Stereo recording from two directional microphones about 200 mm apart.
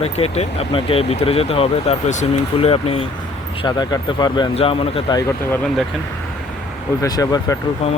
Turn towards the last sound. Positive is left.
turn(degrees=35)  # may be behind; listen again after turning